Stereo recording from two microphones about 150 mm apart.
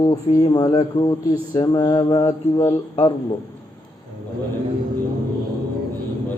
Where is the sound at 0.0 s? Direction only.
25° left (ahead or behind).